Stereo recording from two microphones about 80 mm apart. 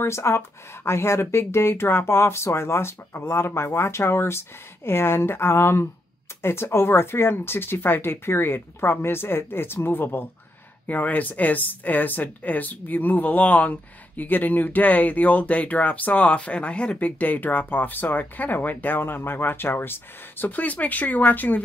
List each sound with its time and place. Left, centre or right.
0.0 s speech: left